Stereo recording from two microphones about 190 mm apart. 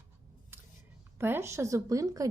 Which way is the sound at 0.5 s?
10° right (ahead or behind).